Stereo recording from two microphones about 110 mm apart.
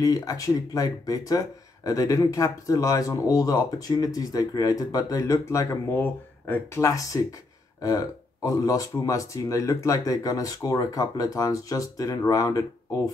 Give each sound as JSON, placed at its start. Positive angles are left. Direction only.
{"t": 0.0, "sound": "speech", "side_deg": 30}